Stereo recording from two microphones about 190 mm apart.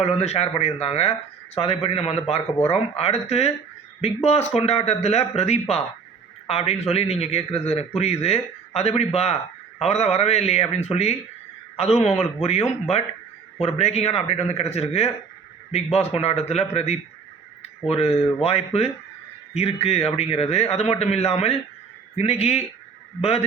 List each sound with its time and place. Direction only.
0.0 s a man's voice: 35° left (ahead or behind)